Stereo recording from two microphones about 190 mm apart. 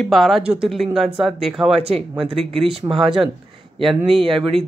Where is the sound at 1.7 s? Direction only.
30° right (ahead or behind).